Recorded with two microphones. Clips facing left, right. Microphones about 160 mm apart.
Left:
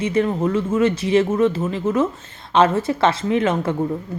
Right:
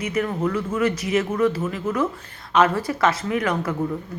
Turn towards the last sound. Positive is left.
turn(degrees=25)  # may be behind; listen again after turning